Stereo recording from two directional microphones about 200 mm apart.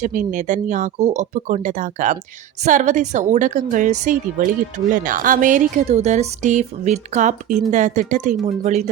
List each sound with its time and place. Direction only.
0.0 s a woman's voice: 40° right (ahead or behind)